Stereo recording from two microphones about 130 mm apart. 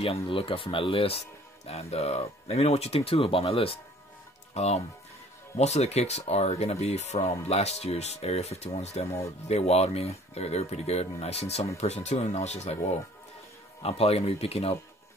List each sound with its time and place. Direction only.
0.3 s speech: 45° left (ahead or behind)
13.8 s speech: 50° left (ahead or behind)